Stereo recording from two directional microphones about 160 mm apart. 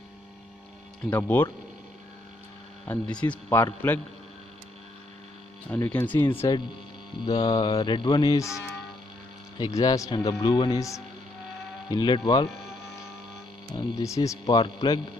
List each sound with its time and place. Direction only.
1.1 s speech: 10° left (ahead or behind)
2.9 s speech: 10° left (ahead or behind)
5.7 s speech: 10° left (ahead or behind)
7.3 s a man's voice: 25° left (ahead or behind)
13.7 s a man's voice: 25° left (ahead or behind)